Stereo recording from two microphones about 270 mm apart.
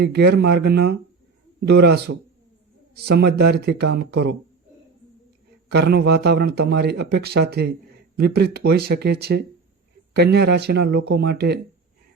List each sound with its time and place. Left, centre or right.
0.0 s speech: right
5.7 s speech: right